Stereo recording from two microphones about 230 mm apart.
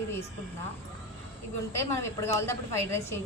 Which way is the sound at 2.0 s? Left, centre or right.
Centre.